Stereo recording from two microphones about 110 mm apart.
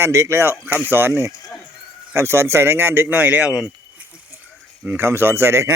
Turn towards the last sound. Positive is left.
turn(degrees=-25)  # may be behind; listen again after turning